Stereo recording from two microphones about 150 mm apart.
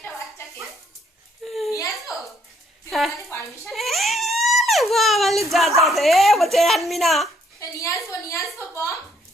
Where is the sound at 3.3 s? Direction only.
15° left (ahead or behind).